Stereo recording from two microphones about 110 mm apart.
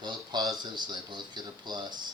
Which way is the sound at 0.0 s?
45° right (ahead or behind).